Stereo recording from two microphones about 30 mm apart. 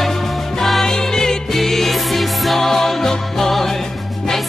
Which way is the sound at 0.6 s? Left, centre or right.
Centre.